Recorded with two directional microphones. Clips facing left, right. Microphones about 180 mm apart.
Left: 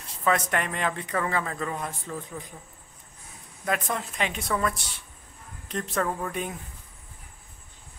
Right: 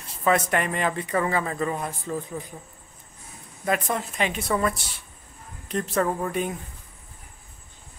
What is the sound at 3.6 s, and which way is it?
A man's voice, 5° right (ahead or behind).